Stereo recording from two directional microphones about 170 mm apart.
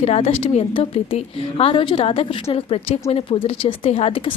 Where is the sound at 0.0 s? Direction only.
35° left (ahead or behind).